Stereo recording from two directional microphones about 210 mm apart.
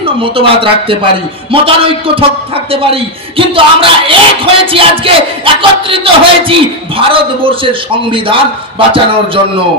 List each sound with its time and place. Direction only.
0.0 s a man's voice: 25° right (ahead or behind)